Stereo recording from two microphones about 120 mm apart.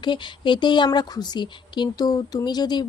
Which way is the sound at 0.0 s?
40° left (ahead or behind).